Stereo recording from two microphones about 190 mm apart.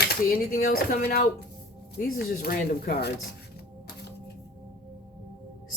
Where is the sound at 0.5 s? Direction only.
50° left (ahead or behind).